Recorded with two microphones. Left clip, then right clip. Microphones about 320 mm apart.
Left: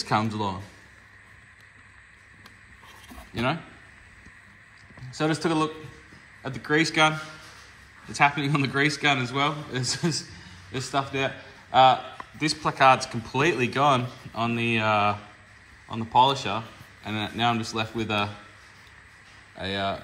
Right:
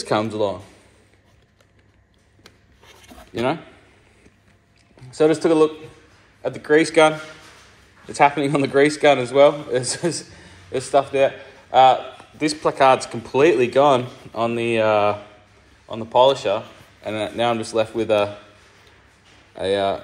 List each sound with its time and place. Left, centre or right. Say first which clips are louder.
0.0 s a man's voice: right 5 dB; centre
5.1 s a man's voice: right 9 dB; centre